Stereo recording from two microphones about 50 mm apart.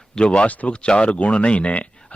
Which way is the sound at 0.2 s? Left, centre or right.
Left.